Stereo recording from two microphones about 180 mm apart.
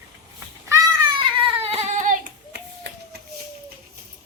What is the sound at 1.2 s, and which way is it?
Baby cry, 30° right (ahead or behind).